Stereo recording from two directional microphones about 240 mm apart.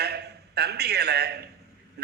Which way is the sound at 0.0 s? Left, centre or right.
Right.